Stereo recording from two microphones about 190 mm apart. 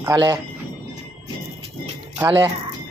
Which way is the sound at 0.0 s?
20° right (ahead or behind).